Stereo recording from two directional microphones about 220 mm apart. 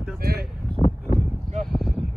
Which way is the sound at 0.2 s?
45° right (ahead or behind).